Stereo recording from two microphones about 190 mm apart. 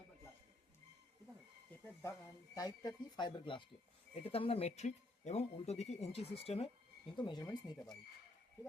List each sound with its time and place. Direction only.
1.7 s speech: 10° left (ahead or behind)